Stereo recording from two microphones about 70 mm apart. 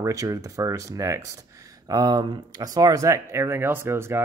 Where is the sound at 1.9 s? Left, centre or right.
Right.